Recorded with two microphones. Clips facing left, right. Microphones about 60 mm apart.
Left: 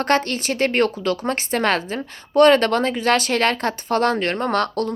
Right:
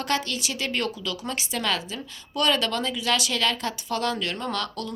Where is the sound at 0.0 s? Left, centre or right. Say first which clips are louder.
Left 7 dB; left.